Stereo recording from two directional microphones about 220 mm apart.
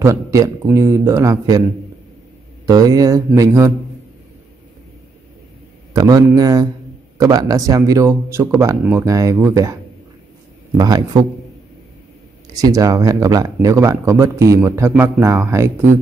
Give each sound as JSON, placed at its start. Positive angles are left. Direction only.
{"t": 0.0, "sound": "speech", "side_deg": -15}
{"t": 2.6, "sound": "speech", "side_deg": -15}
{"t": 5.9, "sound": "speech", "side_deg": -15}
{"t": 10.8, "sound": "speech", "side_deg": -15}
{"t": 12.5, "sound": "speech", "side_deg": -15}